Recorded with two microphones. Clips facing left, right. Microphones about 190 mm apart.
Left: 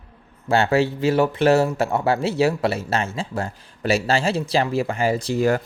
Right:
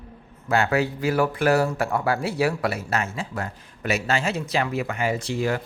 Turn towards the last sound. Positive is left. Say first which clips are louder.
# left 5 dB
turn(degrees=45)  # may be behind; listen again after turning